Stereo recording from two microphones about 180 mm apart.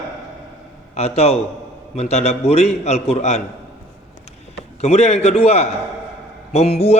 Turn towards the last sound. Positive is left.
turn(degrees=35)  # may be behind; listen again after turning